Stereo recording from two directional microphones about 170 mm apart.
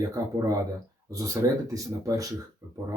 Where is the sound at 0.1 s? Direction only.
20° right (ahead or behind).